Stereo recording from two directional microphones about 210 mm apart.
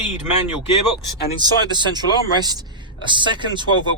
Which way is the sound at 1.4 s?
20° right (ahead or behind).